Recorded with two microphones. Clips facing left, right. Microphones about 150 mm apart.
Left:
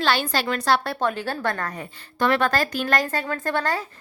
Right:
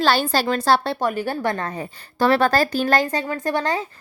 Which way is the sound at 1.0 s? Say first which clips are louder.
Right 2 dB; 10° right (ahead or behind).